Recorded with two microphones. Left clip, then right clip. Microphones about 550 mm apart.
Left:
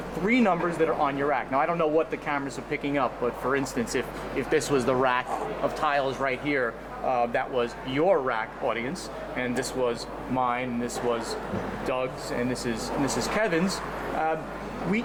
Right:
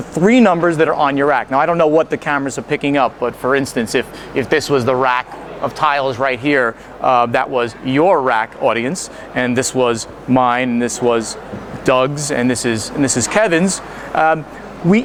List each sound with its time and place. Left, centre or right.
0.3 s speech: right